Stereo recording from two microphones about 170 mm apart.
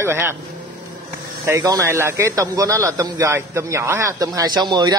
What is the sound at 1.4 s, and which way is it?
Speech, 20° right (ahead or behind).